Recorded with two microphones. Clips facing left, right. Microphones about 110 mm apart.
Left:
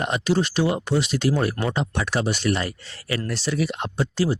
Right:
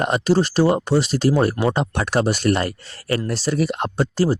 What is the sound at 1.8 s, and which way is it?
Speech, 45° right (ahead or behind).